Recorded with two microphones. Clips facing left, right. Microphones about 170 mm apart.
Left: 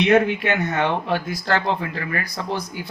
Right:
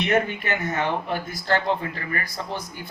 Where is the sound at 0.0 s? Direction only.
80° left.